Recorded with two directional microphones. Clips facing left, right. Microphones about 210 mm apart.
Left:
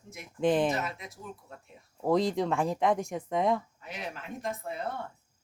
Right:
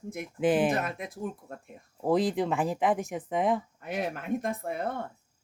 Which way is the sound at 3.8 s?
50° right (ahead or behind).